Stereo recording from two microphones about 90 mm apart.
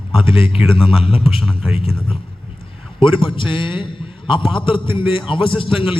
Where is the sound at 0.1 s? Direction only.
90° left.